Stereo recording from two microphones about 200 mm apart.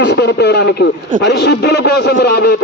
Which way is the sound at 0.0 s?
60° left (ahead or behind).